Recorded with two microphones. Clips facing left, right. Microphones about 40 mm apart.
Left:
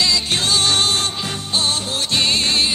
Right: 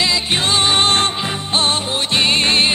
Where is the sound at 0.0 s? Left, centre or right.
Right.